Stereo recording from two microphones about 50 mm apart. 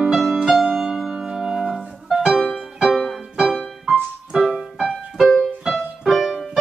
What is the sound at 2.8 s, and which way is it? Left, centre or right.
Music, centre.